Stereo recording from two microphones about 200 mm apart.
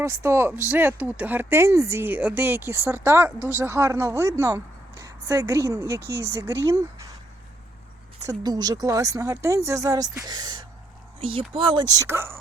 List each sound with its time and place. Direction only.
0.0 s speech: 15° right (ahead or behind)
6.0 s speech: 55° right (ahead or behind)
6.3 s speech: 15° right (ahead or behind)
8.3 s speech: 20° right (ahead or behind)